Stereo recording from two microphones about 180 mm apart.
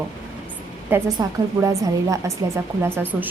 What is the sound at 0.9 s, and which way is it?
A woman's voice, 15° right (ahead or behind).